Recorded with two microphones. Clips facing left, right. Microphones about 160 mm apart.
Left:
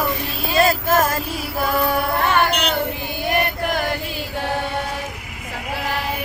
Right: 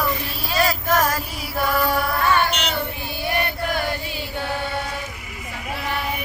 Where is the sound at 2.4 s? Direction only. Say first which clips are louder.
Left 4 dB; 55° left (ahead or behind).